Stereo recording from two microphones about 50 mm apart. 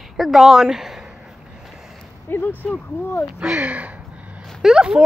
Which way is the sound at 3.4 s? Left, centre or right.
Right.